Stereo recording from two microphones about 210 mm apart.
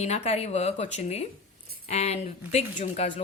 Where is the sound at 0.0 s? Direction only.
30° left (ahead or behind).